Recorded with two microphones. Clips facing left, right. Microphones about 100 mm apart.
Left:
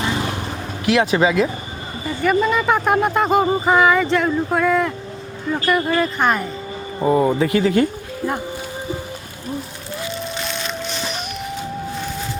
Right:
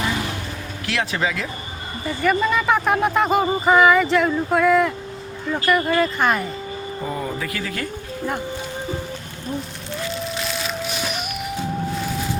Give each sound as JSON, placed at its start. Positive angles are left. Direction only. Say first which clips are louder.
{"t": 0.9, "sound": "speech", "louder": "left 7 dB", "side_deg": 20}
{"t": 2.2, "sound": "speech", "louder": "left 2 dB", "side_deg": 0}
{"t": 7.0, "sound": "speech", "louder": "left 12 dB", "side_deg": 40}
{"t": 7.3, "sound": "speech", "louder": "left 11 dB", "side_deg": 25}
{"t": 10.1, "sound": "music", "louder": "even", "side_deg": 0}